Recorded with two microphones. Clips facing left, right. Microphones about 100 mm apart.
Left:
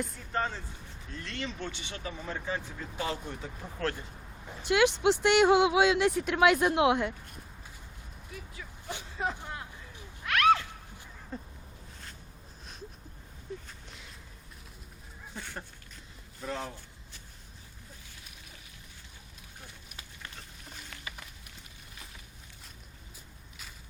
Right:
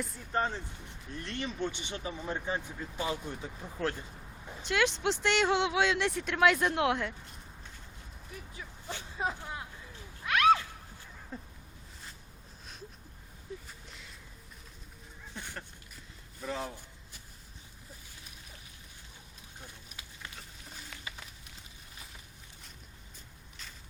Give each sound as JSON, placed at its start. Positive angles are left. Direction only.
{"t": 0.3, "sound": "speech", "side_deg": -20}
{"t": 3.5, "sound": "speech", "side_deg": 5}
{"t": 3.8, "sound": "speech", "side_deg": -15}
{"t": 4.1, "sound": "a sound", "side_deg": 5}
{"t": 4.6, "sound": "speech", "side_deg": 10}
{"t": 9.0, "sound": "speech", "side_deg": -15}
{"t": 10.2, "sound": "a sound", "side_deg": -15}
{"t": 16.4, "sound": "speech", "side_deg": -5}
{"t": 19.6, "sound": "a sound", "side_deg": -10}